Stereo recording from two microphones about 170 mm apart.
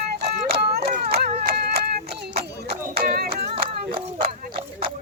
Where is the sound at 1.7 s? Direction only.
70° right (ahead or behind).